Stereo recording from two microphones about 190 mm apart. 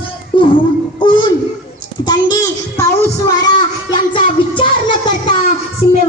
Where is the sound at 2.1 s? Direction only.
20° left (ahead or behind).